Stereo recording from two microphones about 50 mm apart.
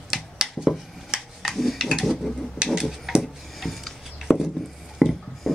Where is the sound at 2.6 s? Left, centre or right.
Centre.